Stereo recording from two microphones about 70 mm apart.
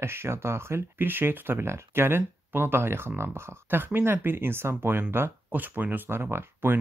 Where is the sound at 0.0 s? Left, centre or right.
Right.